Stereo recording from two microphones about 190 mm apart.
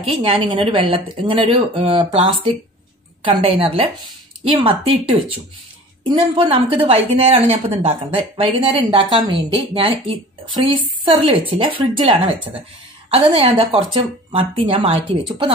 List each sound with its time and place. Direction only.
0.1 s speech: 30° right (ahead or behind)